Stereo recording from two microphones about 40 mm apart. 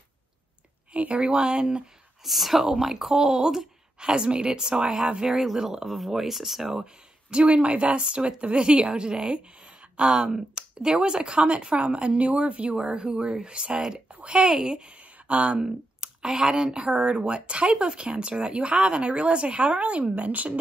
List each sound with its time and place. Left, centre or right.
0.9 s speech: right
1.3 s speech: right
2.2 s speech: centre
5.9 s speech: centre
6.8 s speech: right
12.7 s speech: centre
13.9 s a sound: right
14.4 s speech: centre
15.2 s speech: right
15.6 s speech: right